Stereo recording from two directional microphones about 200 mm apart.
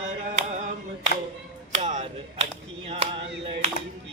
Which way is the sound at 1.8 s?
35° right (ahead or behind).